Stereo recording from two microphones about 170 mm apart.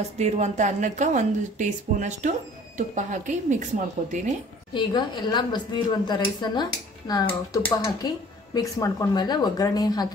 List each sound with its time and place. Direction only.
0.2 s a woman's voice: 40° right (ahead or behind)
4.7 s speech: 25° left (ahead or behind)